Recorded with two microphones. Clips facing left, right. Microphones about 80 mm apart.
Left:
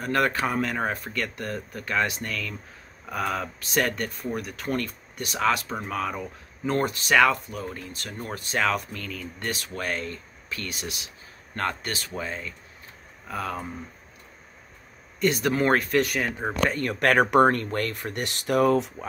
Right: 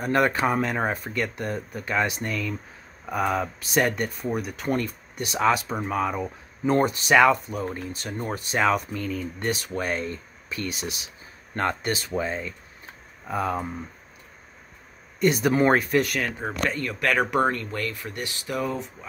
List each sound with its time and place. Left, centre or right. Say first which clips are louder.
0.0 s speech: right 2 dB; centre
15.1 s speech: right 3 dB; centre
16.0 s speech: even; centre
16.7 s speech: left 4 dB; left